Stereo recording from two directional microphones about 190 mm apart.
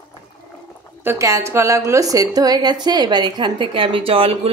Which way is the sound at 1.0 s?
15° right (ahead or behind).